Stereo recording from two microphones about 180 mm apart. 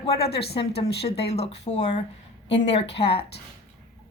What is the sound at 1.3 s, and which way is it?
Speech, 35° left (ahead or behind).